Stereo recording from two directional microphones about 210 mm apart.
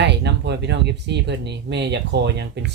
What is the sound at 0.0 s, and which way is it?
Speech, 55° right (ahead or behind).